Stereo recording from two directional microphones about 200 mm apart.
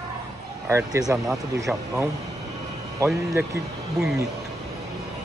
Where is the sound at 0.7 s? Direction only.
15° right (ahead or behind).